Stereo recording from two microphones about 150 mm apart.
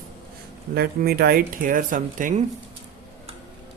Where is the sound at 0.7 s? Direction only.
90° right; by 2.4 s 60° right (ahead or behind).